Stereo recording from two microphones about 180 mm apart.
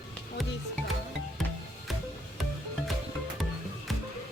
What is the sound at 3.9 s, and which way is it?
Music, centre (ahead or behind).